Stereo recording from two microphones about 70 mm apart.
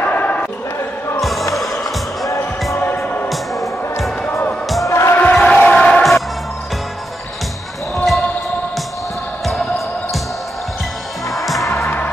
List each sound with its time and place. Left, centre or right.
0.0 s basketball bounce: left
4.3 s music: left
4.8 s basketball bounce: left
5.3 s a sound: centre
5.6 s music: centre
7.9 s basketball bounce: centre
11.3 s music: centre
11.6 s music: left